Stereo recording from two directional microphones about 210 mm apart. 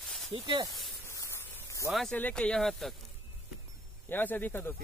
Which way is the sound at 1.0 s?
10° left (ahead or behind).